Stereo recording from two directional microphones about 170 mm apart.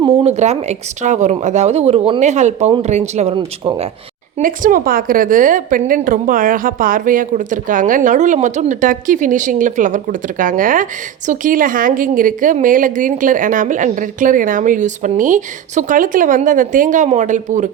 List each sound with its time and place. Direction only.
0.3 s speech: 40° right (ahead or behind)
3.3 s speech: 30° right (ahead or behind)
4.4 s a woman's voice: 50° right (ahead or behind)